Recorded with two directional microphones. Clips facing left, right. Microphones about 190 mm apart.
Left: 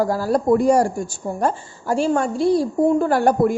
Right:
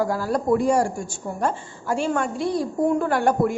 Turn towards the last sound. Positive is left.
turn(degrees=35)  # may be behind; listen again after turning